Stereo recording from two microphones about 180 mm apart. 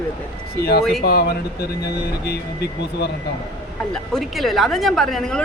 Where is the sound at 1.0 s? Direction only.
65° left (ahead or behind).